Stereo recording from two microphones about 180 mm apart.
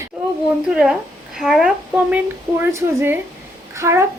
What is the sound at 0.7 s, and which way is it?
A child's voice, 5° right (ahead or behind).